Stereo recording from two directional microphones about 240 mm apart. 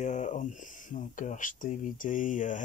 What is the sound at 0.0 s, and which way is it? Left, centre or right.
Speech, left.